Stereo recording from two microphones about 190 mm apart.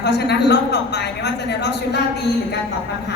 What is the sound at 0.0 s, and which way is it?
A woman's voice, 60° left (ahead or behind).